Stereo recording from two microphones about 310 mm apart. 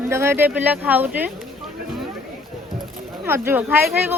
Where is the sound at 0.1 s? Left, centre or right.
Centre.